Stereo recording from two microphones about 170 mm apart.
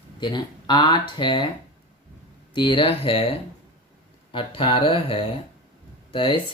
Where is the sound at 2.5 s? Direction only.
30° left (ahead or behind).